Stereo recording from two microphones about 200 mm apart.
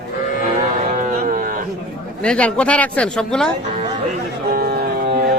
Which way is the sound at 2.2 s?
5° left (ahead or behind).